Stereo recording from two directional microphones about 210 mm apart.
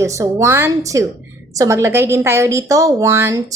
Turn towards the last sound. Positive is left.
turn(degrees=-15)  # may be behind; listen again after turning